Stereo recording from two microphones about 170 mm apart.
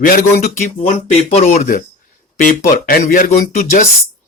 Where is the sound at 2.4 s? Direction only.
50° left (ahead or behind).